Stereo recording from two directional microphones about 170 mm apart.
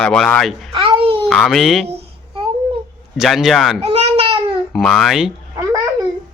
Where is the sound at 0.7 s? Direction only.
30° right (ahead or behind).